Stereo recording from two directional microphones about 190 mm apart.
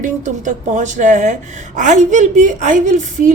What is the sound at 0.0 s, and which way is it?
A woman's voice, 40° right (ahead or behind).